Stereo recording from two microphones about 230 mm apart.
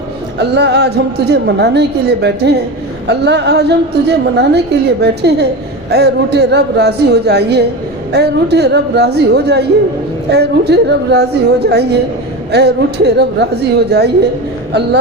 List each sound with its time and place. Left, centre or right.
0.3 s a woman's voice: right